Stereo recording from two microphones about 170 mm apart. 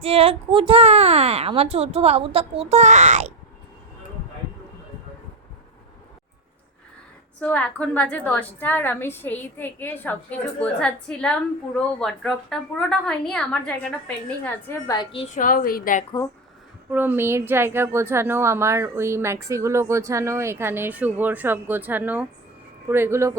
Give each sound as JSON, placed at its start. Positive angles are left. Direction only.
{"t": 0.0, "sound": "a child's voice", "side_deg": -35}
{"t": 7.3, "sound": "a woman's voice", "side_deg": 10}
{"t": 15.4, "sound": "a woman's voice", "side_deg": 55}
{"t": 16.9, "sound": "speech", "side_deg": -10}